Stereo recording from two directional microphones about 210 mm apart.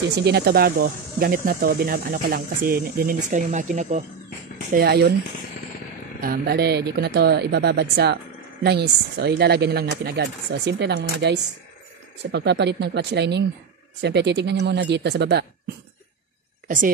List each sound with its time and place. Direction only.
0.1 s speech: 50° right (ahead or behind); by 4.0 s 35° right (ahead or behind)
4.7 s speech: 50° right (ahead or behind)
6.2 s speech: 45° right (ahead or behind)
16.6 s a woman's voice: 40° right (ahead or behind)